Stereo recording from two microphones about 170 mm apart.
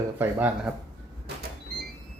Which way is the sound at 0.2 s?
10° right (ahead or behind).